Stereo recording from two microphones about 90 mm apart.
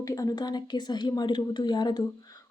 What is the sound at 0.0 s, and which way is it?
Speech, 45° left (ahead or behind).